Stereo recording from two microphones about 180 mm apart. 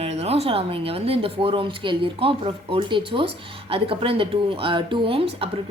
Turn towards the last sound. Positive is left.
turn(degrees=-30)  # may be behind; listen again after turning